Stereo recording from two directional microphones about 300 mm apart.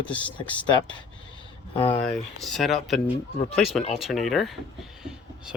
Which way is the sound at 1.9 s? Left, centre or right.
Centre.